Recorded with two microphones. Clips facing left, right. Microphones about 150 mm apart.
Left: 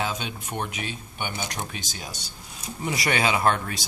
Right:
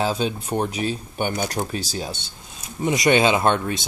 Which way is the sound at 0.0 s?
35° right (ahead or behind).